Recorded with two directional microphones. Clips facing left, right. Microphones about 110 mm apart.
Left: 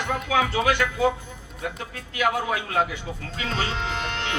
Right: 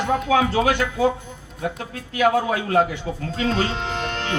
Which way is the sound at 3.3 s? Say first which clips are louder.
Right 6 dB; 40° right (ahead or behind).